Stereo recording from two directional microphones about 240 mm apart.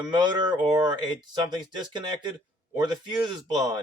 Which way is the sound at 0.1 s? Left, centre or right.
Centre.